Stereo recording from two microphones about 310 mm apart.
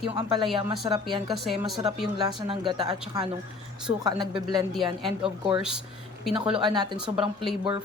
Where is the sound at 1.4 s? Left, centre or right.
Centre.